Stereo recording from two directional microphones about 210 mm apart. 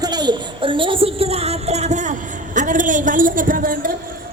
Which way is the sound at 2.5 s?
40° right (ahead or behind).